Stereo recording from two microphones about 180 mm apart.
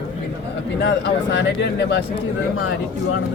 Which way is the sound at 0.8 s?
75° left (ahead or behind).